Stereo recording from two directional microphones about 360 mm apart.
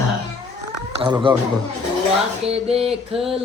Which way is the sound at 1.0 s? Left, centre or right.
Centre.